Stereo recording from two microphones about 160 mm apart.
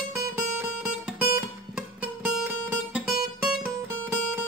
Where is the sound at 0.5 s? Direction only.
5° right (ahead or behind).